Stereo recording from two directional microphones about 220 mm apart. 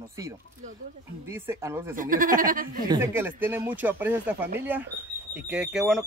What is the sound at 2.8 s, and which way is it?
Speech, 15° right (ahead or behind).